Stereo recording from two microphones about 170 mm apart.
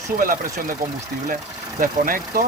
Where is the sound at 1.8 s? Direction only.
55° right (ahead or behind).